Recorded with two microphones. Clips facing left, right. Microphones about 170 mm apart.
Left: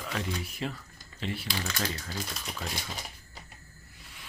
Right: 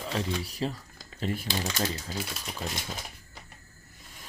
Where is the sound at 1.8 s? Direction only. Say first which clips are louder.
Right 3 dB; 25° right (ahead or behind).